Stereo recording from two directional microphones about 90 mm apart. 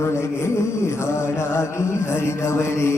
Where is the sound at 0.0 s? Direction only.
30° left (ahead or behind).